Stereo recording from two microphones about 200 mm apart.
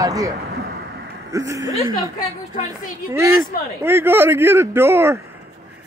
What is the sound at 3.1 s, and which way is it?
Speech, 15° right (ahead or behind).